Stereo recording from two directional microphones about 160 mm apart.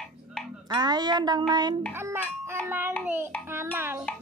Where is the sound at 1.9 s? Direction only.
15° right (ahead or behind).